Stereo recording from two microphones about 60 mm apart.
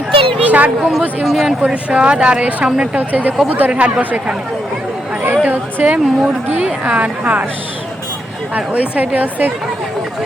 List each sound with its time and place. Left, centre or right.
0.4 s a woman's voice: right
1.2 s speech: centre
1.6 s a woman's voice: centre
5.2 s a woman's voice: right
8.5 s a woman's voice: right